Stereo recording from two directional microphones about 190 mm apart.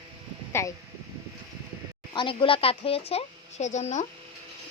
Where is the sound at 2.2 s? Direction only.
25° left (ahead or behind).